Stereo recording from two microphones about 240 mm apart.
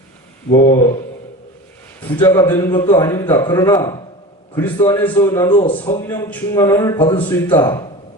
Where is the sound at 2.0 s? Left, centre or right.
Centre.